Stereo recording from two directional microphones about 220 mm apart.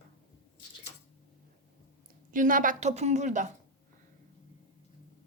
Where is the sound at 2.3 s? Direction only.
35° right (ahead or behind).